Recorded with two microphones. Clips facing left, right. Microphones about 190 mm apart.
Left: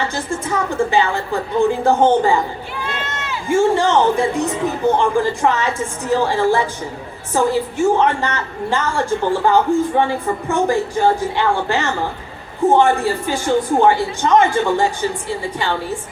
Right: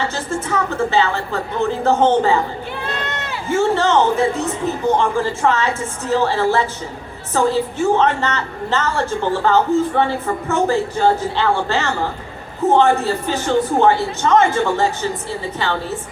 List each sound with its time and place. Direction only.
0.3 s a woman's voice: 15° left (ahead or behind)
3.5 s a woman's voice: 15° left (ahead or behind)
4.9 s a woman's voice: 15° left (ahead or behind)